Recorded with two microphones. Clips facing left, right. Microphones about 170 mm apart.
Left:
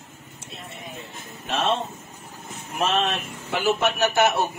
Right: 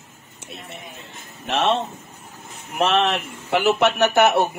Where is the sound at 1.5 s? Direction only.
70° right (ahead or behind).